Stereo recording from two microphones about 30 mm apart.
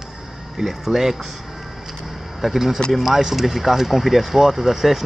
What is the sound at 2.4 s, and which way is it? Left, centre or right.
Speech, centre.